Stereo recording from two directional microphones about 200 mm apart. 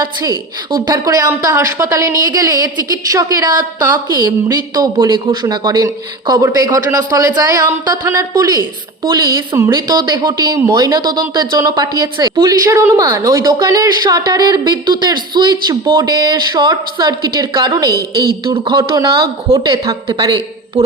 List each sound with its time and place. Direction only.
0.2 s a woman's voice: 20° right (ahead or behind)
18.8 s a woman's voice: 15° right (ahead or behind)